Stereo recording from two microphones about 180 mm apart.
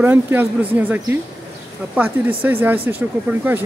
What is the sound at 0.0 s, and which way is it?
Speech, 10° right (ahead or behind).